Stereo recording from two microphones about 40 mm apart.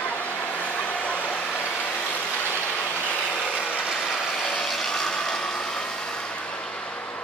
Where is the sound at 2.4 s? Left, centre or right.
Left.